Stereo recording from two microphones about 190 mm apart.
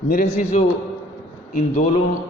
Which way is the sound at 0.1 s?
45° left (ahead or behind).